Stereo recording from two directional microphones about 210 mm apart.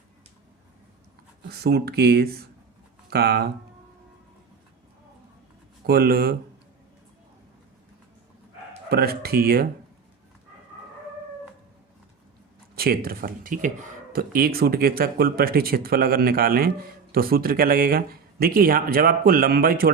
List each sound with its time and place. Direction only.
1.5 s speech: 50° right (ahead or behind)
5.8 s speech: 45° right (ahead or behind)
8.9 s speech: 45° right (ahead or behind)
12.7 s speech: 45° right (ahead or behind)